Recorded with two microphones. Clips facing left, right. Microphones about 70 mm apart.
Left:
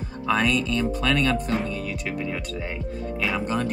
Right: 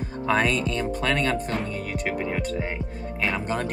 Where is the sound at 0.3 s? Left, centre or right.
Right.